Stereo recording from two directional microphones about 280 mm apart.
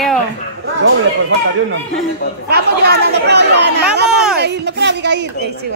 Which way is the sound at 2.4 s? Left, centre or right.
Right.